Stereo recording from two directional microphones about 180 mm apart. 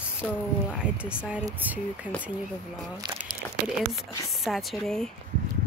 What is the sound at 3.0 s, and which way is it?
Speech, 25° right (ahead or behind).